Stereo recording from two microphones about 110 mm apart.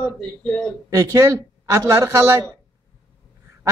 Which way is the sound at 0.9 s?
30° right (ahead or behind).